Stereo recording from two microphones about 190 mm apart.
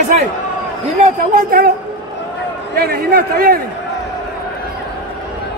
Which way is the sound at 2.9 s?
50° right (ahead or behind).